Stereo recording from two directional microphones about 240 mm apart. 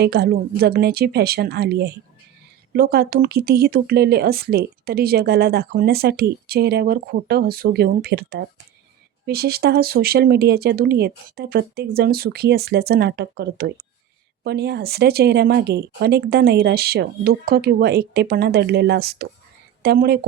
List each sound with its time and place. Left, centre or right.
0.0 s speech: right